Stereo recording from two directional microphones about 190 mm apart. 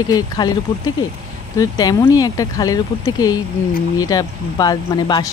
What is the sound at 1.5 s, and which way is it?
Speech, 20° left (ahead or behind).